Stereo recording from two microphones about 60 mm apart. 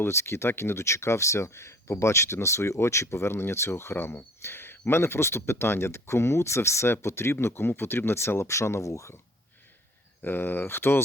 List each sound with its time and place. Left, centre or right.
0.0 s speech: left
10.2 s speech: left